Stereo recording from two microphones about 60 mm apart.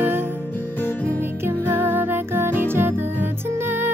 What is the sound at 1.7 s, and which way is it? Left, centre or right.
Music, right.